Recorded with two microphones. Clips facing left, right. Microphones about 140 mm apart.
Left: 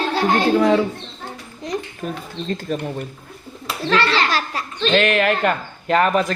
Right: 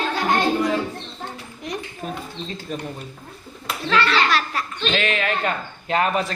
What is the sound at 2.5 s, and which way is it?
Speech, 50° left (ahead or behind).